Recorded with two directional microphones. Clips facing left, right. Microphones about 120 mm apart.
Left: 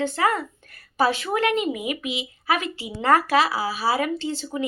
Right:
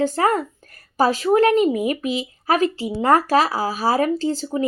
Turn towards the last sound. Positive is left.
turn(degrees=-40)  # may be behind; listen again after turning